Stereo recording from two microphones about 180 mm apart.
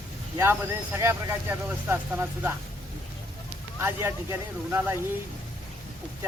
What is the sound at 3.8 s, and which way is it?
Speech, 15° right (ahead or behind).